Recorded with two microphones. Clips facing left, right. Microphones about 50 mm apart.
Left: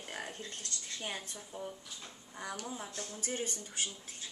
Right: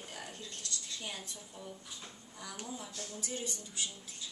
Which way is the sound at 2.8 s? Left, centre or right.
Left.